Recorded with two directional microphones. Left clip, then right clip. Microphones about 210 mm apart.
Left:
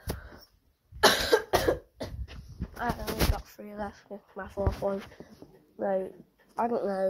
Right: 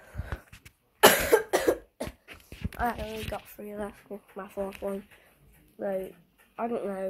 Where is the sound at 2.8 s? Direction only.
15° right (ahead or behind).